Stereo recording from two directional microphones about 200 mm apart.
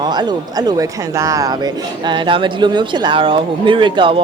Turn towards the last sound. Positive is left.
turn(degrees=-25)  # may be behind; listen again after turning